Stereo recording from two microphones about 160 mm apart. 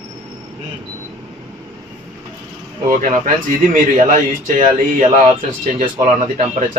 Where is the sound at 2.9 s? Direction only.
55° right (ahead or behind).